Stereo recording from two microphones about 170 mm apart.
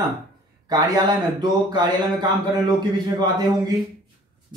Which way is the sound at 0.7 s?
25° right (ahead or behind).